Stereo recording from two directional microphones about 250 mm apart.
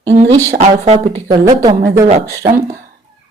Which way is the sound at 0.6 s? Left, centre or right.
Right.